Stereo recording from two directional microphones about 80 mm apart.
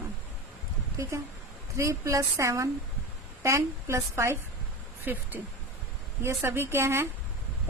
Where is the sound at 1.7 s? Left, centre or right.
Right.